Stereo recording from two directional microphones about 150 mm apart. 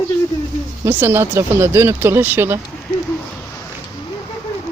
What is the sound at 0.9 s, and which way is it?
Speech, 15° right (ahead or behind).